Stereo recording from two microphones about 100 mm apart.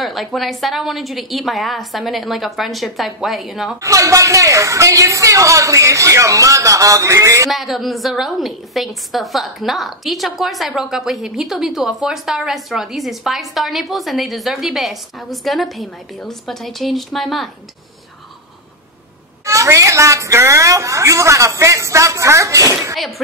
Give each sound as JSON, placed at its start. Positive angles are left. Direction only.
{"t": 0.0, "sound": "a woman's voice", "side_deg": 0}
{"t": 3.8, "sound": "speech", "side_deg": -35}
{"t": 7.4, "sound": "a woman's voice", "side_deg": 0}
{"t": 19.4, "sound": "speech", "side_deg": -30}
{"t": 22.9, "sound": "a woman's voice", "side_deg": 0}